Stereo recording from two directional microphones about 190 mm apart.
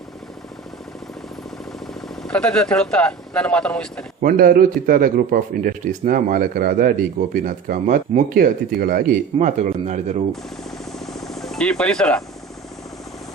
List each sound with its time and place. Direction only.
2.2 s speech: 5° left (ahead or behind)
4.2 s speech: 50° right (ahead or behind)
10.6 s vehicle: centre (ahead or behind)